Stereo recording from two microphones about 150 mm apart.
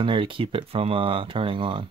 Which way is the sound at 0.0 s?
35° right (ahead or behind).